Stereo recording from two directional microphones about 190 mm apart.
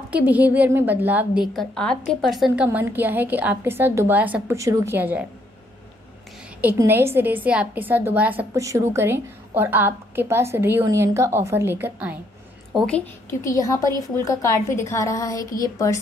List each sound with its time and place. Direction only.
0.1 s a woman's voice: 10° right (ahead or behind)
6.6 s a woman's voice: 10° right (ahead or behind)
12.7 s a woman's voice: 5° left (ahead or behind)